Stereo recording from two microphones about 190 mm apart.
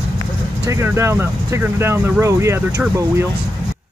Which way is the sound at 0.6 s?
15° right (ahead or behind).